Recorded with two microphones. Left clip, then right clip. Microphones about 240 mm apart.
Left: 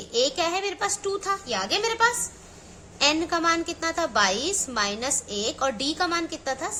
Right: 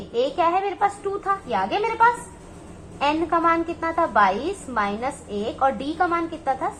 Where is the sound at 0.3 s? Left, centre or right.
Left.